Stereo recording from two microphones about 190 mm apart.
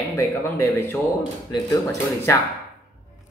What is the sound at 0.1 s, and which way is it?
Speech, 15° left (ahead or behind).